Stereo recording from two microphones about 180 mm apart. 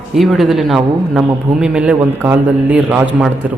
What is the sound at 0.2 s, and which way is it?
A man's voice, centre (ahead or behind).